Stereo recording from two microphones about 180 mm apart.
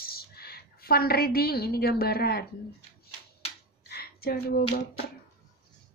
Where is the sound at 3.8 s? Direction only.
60° left (ahead or behind).